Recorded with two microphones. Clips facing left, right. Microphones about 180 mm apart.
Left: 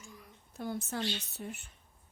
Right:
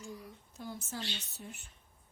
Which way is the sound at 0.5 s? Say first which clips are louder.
Left 6 dB; 60° left (ahead or behind).